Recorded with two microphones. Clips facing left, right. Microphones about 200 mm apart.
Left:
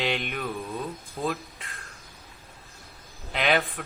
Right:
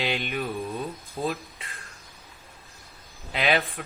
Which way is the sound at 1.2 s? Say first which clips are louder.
Right 1 dB; 25° right (ahead or behind).